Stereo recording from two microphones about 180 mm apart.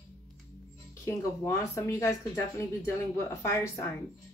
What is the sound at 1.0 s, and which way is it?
Speech, 15° left (ahead or behind).